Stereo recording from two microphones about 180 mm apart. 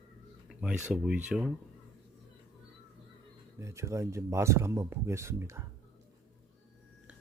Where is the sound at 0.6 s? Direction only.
5° right (ahead or behind).